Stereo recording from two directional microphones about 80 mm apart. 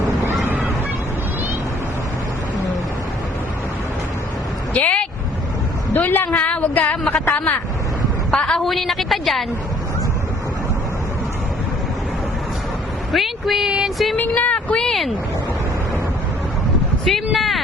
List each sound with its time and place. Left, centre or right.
4.7 s vehicle: centre
5.9 s a sound: left
7.0 s a woman's voice: centre
13.1 s a woman's voice: centre
14.2 s a woman's voice: centre
17.1 s a woman's voice: centre